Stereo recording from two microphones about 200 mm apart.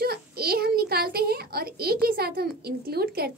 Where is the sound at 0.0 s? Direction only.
50° right (ahead or behind).